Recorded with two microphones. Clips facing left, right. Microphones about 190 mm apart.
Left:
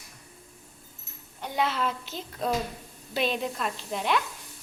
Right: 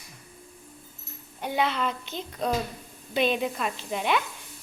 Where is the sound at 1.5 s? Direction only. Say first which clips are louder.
Right 1 dB; centre (ahead or behind).